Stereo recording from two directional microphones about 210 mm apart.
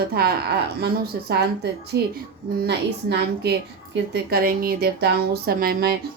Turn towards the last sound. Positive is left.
turn(degrees=-45)  # may be behind; listen again after turning